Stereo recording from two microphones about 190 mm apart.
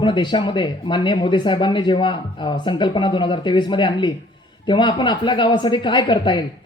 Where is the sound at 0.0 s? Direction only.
25° left (ahead or behind).